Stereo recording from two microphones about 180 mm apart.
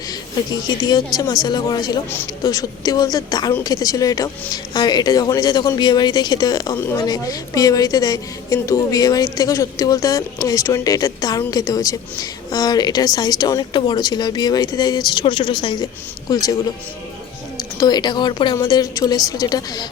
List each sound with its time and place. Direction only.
0.7 s speech: 20° left (ahead or behind)
17.6 s speech: 20° left (ahead or behind)